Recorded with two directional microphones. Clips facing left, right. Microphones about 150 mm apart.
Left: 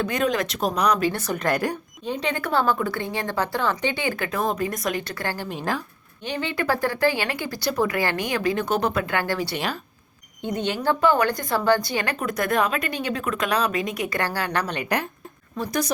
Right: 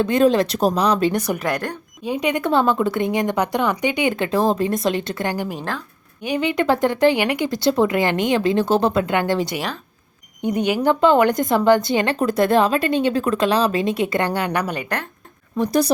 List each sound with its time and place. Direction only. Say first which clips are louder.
0.0 s a woman's voice: right 8 dB; 30° right (ahead or behind)
1.1 s speech: right 6 dB; 15° right (ahead or behind)
1.5 s speech: even; 10° left (ahead or behind)
2.0 s a woman's voice: right 6 dB; 10° right (ahead or behind)